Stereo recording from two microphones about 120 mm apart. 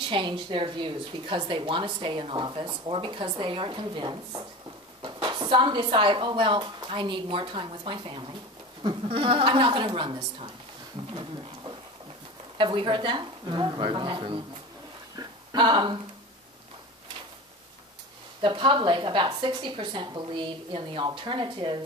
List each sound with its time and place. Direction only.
0.0 s a woman's voice: 45° right (ahead or behind)
12.5 s a woman's voice: 45° right (ahead or behind)
15.1 s a sound: 40° right (ahead or behind)
18.4 s a woman's voice: 45° right (ahead or behind)